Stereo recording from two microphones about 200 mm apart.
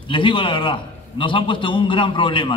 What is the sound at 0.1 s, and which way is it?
A man's voice, 25° left (ahead or behind).